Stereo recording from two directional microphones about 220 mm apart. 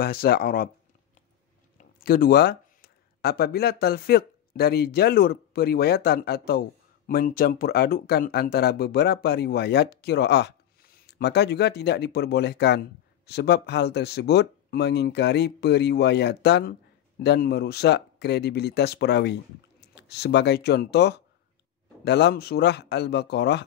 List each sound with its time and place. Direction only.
0.0 s speech: 45° left (ahead or behind)
1.8 s speech: 40° left (ahead or behind)